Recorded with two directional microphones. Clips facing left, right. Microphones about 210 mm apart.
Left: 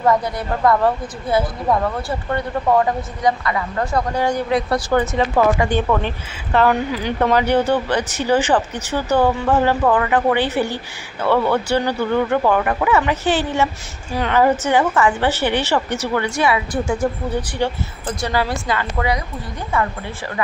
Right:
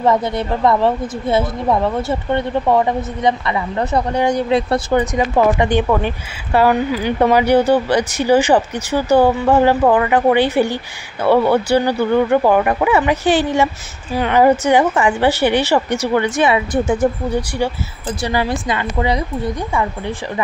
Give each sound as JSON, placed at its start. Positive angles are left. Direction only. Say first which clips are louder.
{"t": 0.0, "sound": "a woman's voice", "louder": "right 2 dB", "side_deg": -25}
{"t": 19.7, "sound": "a woman's voice", "louder": "right 2 dB", "side_deg": -15}